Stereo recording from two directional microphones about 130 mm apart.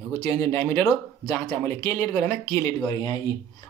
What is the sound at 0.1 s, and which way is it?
Speech, 20° left (ahead or behind).